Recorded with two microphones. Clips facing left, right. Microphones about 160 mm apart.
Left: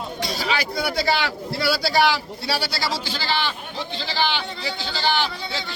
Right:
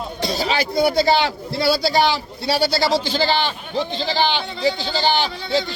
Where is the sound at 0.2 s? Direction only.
25° right (ahead or behind).